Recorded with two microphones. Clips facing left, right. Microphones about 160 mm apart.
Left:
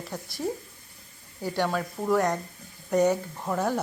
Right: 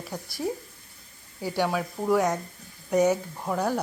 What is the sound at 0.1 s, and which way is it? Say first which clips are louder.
Speech: right 1 dB; centre (ahead or behind).